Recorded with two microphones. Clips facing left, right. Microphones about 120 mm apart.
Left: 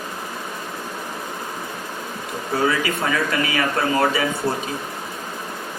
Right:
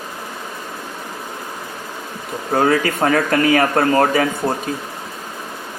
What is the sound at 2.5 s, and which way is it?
Speech, 50° right (ahead or behind).